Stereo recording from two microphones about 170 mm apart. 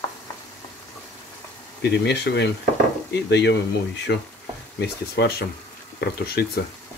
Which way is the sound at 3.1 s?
85° left.